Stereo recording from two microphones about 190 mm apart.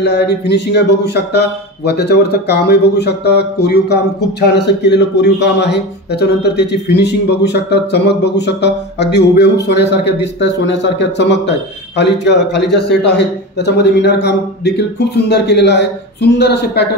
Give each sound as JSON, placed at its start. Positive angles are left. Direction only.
{"t": 0.0, "sound": "speech", "side_deg": 60}